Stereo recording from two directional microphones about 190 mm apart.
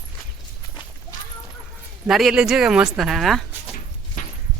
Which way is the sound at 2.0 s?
Centre (ahead or behind).